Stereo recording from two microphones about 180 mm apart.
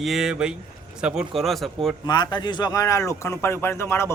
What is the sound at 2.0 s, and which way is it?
A man's voice, 25° left (ahead or behind).